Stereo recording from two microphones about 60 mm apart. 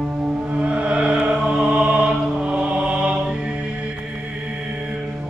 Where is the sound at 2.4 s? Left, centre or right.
Centre.